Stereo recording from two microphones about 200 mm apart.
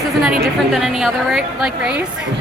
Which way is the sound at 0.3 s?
Centre (ahead or behind).